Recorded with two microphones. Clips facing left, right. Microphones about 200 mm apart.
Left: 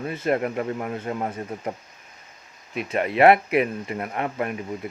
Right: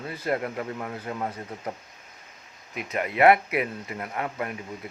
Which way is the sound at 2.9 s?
25° left (ahead or behind).